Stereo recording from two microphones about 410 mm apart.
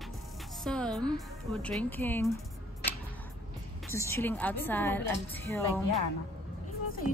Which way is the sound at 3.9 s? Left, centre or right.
Centre.